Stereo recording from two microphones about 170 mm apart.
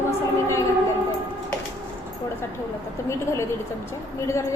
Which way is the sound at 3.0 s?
15° left (ahead or behind).